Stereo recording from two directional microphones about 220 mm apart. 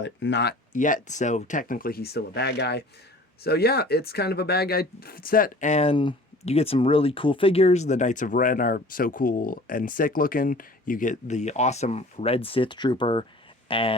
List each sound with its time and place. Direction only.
0.0 s speech: 55° left (ahead or behind)
0.7 s speech: 35° left (ahead or behind)